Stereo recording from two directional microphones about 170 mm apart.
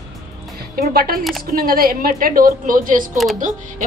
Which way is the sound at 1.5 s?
55° right (ahead or behind).